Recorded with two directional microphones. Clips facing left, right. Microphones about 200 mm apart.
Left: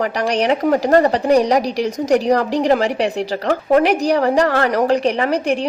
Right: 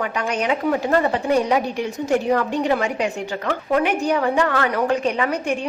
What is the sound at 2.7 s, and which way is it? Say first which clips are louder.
A woman's voice: left 5 dB; 35° left (ahead or behind).